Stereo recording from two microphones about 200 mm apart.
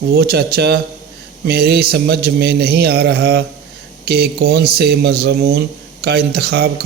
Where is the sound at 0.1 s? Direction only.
50° right (ahead or behind).